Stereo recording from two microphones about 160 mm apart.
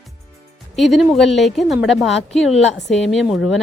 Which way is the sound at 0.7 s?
Centre (ahead or behind).